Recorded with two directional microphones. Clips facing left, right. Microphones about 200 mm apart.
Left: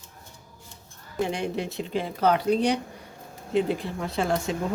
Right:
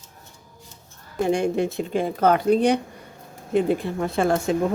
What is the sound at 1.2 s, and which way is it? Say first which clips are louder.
Speech: right 6 dB; 45° right (ahead or behind).